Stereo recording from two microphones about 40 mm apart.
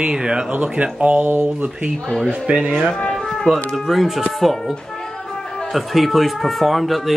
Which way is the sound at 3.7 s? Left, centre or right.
Centre.